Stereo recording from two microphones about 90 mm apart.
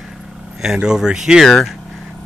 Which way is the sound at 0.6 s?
5° right (ahead or behind).